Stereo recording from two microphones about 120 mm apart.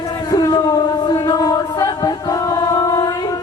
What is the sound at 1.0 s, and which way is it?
Chant, 35° left (ahead or behind).